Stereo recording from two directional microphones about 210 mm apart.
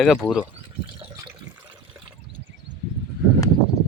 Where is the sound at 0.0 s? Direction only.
Centre (ahead or behind).